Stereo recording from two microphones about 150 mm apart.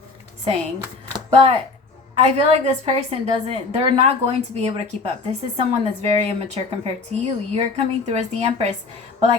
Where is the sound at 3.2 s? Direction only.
40° right (ahead or behind).